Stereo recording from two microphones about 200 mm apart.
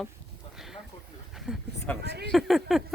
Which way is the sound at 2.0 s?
55° right (ahead or behind).